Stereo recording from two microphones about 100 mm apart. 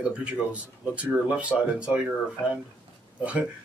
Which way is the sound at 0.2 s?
15° right (ahead or behind).